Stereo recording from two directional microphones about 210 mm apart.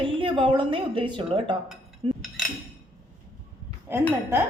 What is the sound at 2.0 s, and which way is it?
Cutlery, 25° right (ahead or behind).